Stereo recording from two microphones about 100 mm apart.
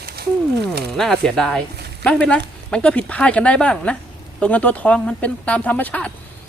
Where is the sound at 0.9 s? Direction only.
5° left (ahead or behind).